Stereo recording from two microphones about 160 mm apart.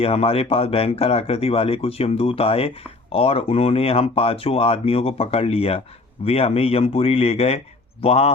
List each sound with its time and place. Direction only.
0.0 s speech: 35° left (ahead or behind)